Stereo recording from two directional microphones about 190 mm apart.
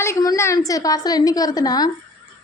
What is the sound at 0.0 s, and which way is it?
A woman's voice, 15° left (ahead or behind).